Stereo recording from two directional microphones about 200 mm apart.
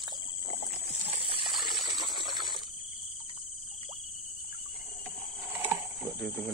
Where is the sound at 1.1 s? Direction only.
30° right (ahead or behind).